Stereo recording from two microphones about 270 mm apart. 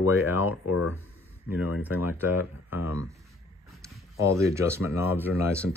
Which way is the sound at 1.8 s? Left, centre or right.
Centre.